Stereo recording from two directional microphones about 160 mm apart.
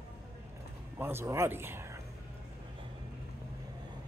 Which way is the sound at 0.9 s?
15° right (ahead or behind).